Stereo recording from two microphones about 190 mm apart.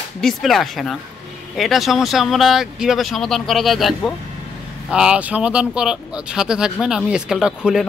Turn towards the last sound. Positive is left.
turn(degrees=-5)  # may be behind; listen again after turning